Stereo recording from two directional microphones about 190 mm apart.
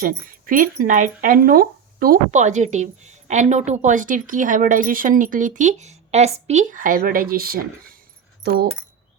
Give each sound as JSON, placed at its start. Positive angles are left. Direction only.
{"t": 0.0, "sound": "speech", "side_deg": -50}